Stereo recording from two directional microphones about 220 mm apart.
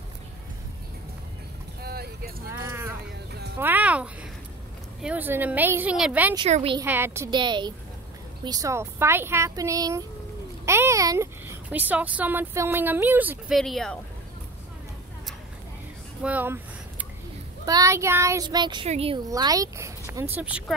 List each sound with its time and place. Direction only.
1.8 s vehicle: 45° right (ahead or behind)
2.7 s a sound: 10° right (ahead or behind)
3.5 s speech: 10° right (ahead or behind)
6.3 s a woman's voice: 25° right (ahead or behind)
6.8 s a woman's voice: 10° right (ahead or behind)
16.2 s a sound: 5° right (ahead or behind)
17.6 s a woman's voice: 15° right (ahead or behind)
19.2 s speech: 15° right (ahead or behind)